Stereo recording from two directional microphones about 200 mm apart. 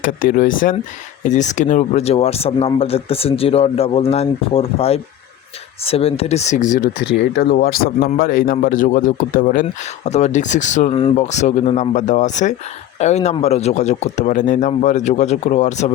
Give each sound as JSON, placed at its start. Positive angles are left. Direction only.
{"t": 0.0, "sound": "a man's voice", "side_deg": 45}